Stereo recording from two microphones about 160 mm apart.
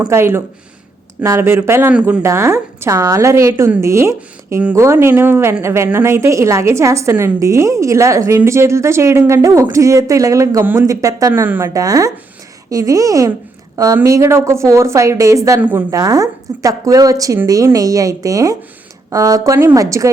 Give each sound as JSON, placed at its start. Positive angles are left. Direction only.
{"t": 0.0, "sound": "a woman's voice", "side_deg": -15}